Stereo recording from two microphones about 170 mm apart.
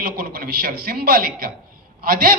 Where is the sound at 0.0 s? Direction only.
60° right (ahead or behind).